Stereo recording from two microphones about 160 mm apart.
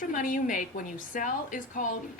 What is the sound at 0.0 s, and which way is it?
Speech, 55° left (ahead or behind).